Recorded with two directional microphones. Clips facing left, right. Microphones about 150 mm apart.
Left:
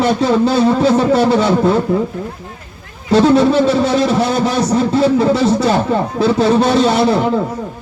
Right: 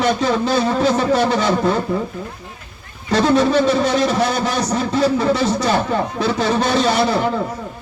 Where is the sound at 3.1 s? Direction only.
25° left (ahead or behind).